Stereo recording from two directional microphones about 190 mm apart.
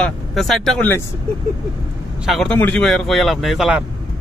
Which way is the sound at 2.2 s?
Centre (ahead or behind).